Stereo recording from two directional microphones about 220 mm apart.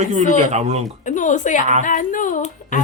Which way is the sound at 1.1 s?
35° left (ahead or behind).